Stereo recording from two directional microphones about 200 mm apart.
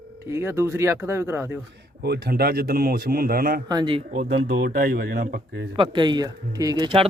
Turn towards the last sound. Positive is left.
turn(degrees=-25)  # may be behind; listen again after turning